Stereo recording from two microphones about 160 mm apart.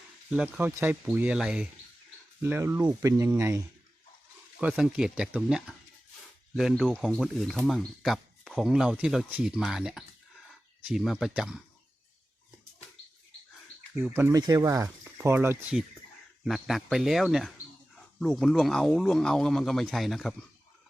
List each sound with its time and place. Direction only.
0.3 s speech: 5° right (ahead or behind)
4.7 s speech: 5° right (ahead or behind)
13.9 s speech: 15° right (ahead or behind)
16.4 s speech: centre (ahead or behind)